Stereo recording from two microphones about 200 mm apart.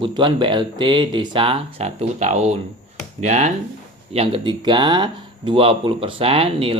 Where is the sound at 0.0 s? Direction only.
25° right (ahead or behind).